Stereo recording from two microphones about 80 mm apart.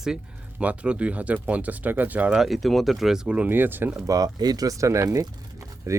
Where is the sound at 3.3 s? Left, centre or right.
Right.